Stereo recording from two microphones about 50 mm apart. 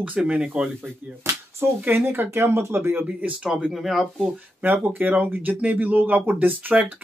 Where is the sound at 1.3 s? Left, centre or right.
Right.